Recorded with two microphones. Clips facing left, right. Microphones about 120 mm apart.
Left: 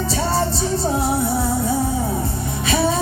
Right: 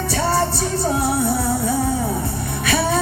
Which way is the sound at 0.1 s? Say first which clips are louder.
Right 3 dB; 60° right (ahead or behind).